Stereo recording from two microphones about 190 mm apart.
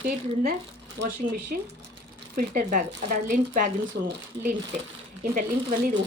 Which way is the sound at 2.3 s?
45° right (ahead or behind).